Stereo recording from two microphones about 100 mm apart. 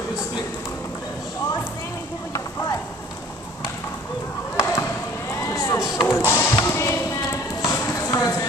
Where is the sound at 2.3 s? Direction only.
35° left (ahead or behind).